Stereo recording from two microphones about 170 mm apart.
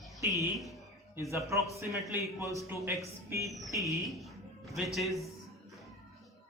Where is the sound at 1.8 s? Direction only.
15° right (ahead or behind).